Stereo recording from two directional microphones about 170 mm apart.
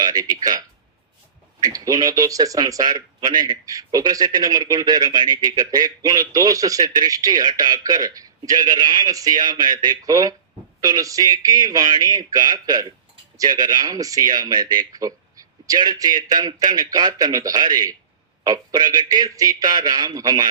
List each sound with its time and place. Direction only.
0.0 s speech: 20° right (ahead or behind)
1.6 s speech: 20° right (ahead or behind)